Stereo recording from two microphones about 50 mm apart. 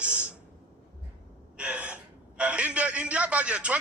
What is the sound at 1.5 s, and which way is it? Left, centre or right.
A man's voice, right.